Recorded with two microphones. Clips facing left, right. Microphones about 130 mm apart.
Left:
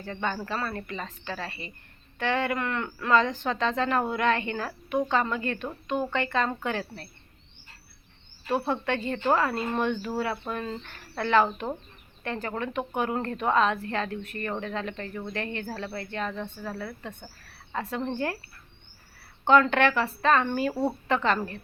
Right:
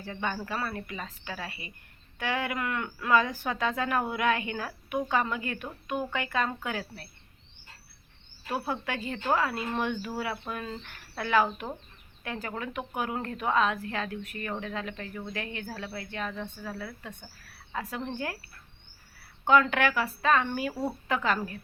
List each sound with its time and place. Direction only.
0.0 s a woman's voice: 10° right (ahead or behind)
8.4 s speech: 5° right (ahead or behind)
19.5 s speech: 5° right (ahead or behind)